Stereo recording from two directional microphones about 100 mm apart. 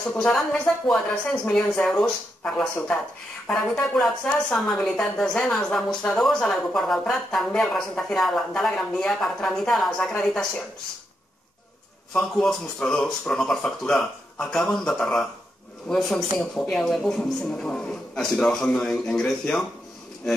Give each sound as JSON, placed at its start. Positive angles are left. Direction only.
{"t": 0.2, "sound": "speech", "side_deg": 10}
{"t": 12.1, "sound": "speech", "side_deg": 5}